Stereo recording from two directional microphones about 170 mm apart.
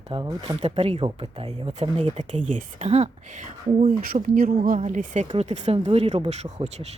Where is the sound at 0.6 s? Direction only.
35° right (ahead or behind).